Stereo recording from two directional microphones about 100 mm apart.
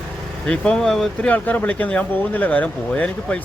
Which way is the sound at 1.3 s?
15° left (ahead or behind).